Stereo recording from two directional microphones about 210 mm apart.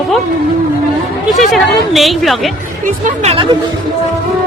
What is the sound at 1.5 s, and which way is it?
Speech, centre (ahead or behind).